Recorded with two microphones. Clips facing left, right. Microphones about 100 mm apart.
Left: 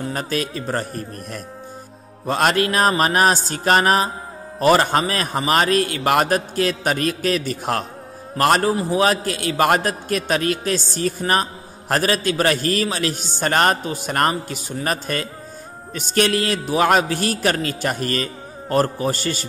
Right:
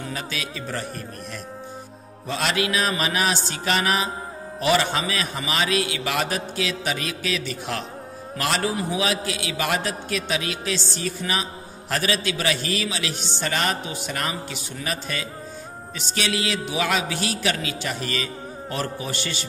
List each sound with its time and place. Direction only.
0.0 s a man's voice: 45° left (ahead or behind)